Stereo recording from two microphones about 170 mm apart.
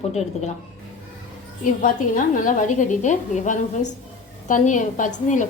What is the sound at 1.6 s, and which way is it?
A woman's voice, 50° left (ahead or behind).